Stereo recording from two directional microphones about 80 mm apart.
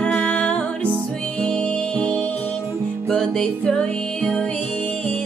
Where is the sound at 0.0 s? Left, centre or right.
Centre.